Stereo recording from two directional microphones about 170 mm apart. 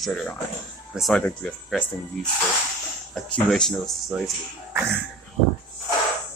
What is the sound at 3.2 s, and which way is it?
Speech, 5° left (ahead or behind).